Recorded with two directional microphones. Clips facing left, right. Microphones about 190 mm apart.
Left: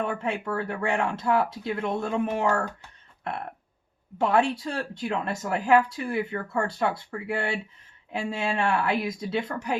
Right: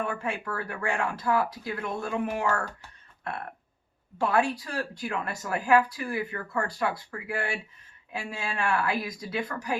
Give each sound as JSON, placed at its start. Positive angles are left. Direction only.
{"t": 0.0, "sound": "speech", "side_deg": 20}
{"t": 4.2, "sound": "speech", "side_deg": 25}